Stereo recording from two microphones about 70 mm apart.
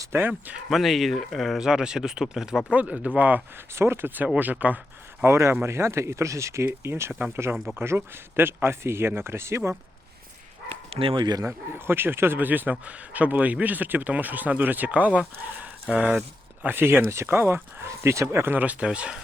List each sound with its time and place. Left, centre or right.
0.1 s speech: right
0.7 s speech: centre
1.5 s speech: centre
2.7 s speech: right
3.8 s speech: right
5.2 s speech: right
7.5 s speech: centre
7.8 s speech: right
11.2 s speech: right
11.4 s speech: right; by 16.0 s centre
16.6 s speech: right
18.5 s speech: right